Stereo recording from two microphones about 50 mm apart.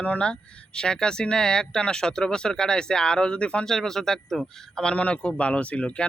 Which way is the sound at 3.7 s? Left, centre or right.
Centre.